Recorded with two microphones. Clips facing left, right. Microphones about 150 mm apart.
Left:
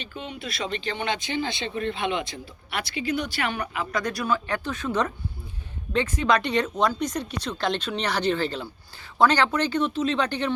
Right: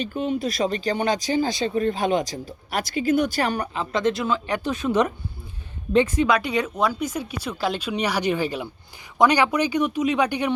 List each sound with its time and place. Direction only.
0.0 s speech: 45° right (ahead or behind); by 10.5 s 10° right (ahead or behind)